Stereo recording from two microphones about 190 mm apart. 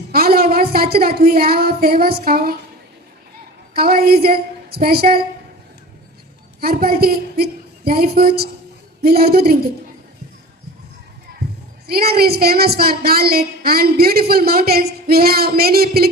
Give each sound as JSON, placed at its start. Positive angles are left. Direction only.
{"t": 0.1, "sound": "a woman's voice", "side_deg": -50}
{"t": 3.8, "sound": "a woman's voice", "side_deg": -50}
{"t": 6.6, "sound": "a woman's voice", "side_deg": -50}
{"t": 11.9, "sound": "a woman's voice", "side_deg": -55}